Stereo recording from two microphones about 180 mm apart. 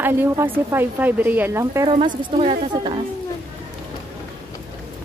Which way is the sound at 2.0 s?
35° right (ahead or behind).